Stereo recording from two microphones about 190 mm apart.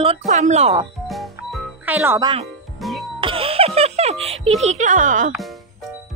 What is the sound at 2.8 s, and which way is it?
Music, centre (ahead or behind).